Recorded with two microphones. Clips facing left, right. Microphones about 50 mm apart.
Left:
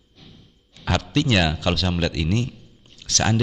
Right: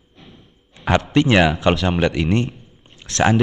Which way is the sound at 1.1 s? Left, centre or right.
Right.